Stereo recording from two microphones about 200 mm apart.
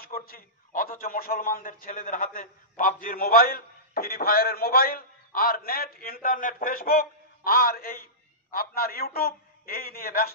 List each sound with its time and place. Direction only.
0.3 s a man's voice: 45° left (ahead or behind)